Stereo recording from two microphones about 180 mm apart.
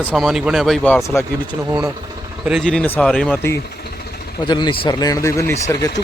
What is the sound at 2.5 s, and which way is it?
Speech, centre (ahead or behind).